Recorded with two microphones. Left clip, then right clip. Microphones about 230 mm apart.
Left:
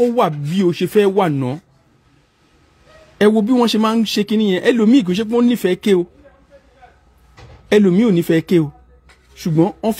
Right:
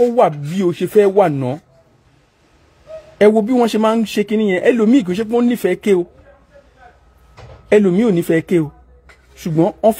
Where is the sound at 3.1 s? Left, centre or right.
Left.